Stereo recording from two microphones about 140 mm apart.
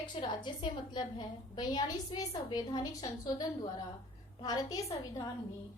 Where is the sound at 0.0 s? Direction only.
35° left (ahead or behind).